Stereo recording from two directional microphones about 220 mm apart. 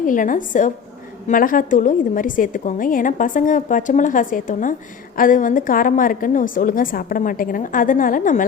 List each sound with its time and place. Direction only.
0.0 s a woman's voice: 35° left (ahead or behind)